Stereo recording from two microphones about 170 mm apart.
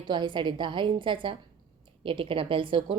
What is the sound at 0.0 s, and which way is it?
A woman's voice, 25° right (ahead or behind).